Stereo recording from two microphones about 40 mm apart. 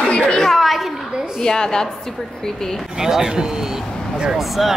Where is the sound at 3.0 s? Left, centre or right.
Centre.